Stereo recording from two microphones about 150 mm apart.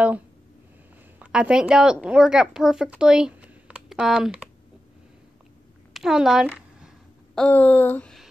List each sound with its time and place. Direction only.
1.2 s speech: 5° right (ahead or behind)
5.9 s a woman's voice: 5° right (ahead or behind)
7.3 s speech: 10° left (ahead or behind)